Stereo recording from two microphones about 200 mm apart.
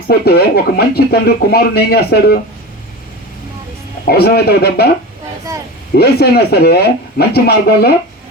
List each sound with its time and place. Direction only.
0.1 s speech: 50° left (ahead or behind)
4.0 s speech: 50° left (ahead or behind)
6.0 s speech: 50° left (ahead or behind)